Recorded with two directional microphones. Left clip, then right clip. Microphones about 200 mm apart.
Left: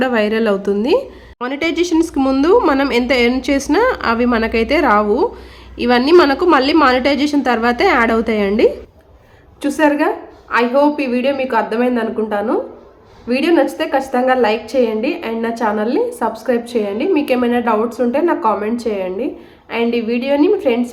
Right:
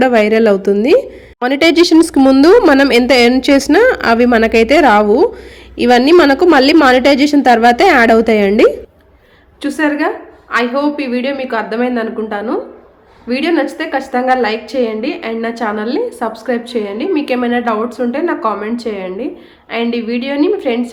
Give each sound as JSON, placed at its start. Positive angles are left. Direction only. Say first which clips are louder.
{"t": 0.0, "sound": "a woman's voice", "louder": "right 6 dB", "side_deg": -20}
{"t": 1.4, "sound": "a woman's voice", "louder": "right 8 dB", "side_deg": -30}
{"t": 9.6, "sound": "a woman's voice", "louder": "left 1 dB", "side_deg": 0}